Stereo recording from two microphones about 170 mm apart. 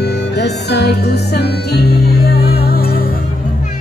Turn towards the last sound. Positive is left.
turn(degrees=60)  # may be behind; listen again after turning